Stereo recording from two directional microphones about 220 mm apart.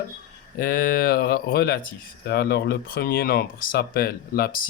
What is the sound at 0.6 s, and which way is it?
Speech, 40° left (ahead or behind).